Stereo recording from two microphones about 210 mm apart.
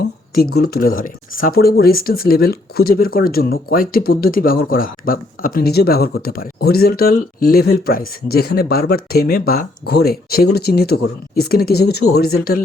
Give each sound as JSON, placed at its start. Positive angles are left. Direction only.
{"t": 0.5, "sound": "speech", "side_deg": 45}